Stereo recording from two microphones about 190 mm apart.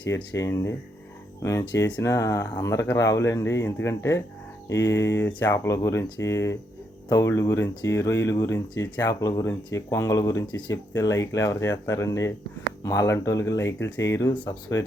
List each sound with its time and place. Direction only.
0.1 s speech: 10° left (ahead or behind)